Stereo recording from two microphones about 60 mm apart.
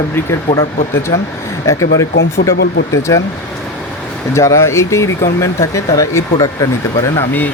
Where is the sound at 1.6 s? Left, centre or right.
Left.